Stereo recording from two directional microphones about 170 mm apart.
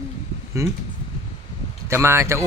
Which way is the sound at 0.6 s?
15° right (ahead or behind).